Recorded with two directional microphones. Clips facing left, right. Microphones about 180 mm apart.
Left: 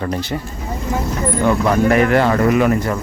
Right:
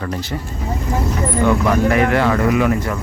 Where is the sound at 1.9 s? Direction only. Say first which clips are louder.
Left 4 dB; 45° left (ahead or behind).